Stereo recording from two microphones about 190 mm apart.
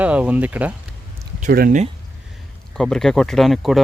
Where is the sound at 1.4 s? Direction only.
50° right (ahead or behind).